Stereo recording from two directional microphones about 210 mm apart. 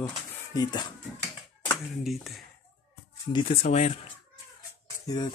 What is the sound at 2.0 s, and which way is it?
Speech, centre (ahead or behind).